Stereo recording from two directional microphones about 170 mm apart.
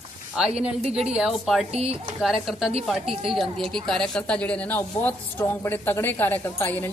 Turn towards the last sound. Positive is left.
turn(degrees=10)  # may be behind; listen again after turning